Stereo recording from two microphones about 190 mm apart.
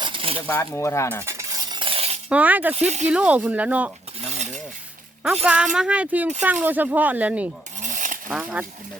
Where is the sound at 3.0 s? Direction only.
5° right (ahead or behind).